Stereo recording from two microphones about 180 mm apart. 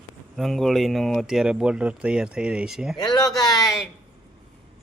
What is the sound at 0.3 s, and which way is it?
Speech, centre (ahead or behind).